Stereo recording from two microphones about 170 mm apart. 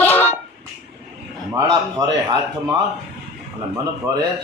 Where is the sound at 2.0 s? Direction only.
20° right (ahead or behind).